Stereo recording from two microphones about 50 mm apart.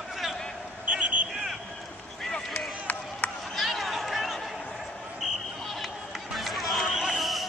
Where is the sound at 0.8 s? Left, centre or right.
Right.